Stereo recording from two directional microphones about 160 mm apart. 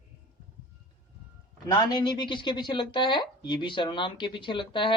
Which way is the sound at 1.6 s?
25° left (ahead or behind).